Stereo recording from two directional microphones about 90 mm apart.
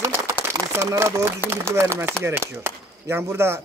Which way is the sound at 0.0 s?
30° right (ahead or behind).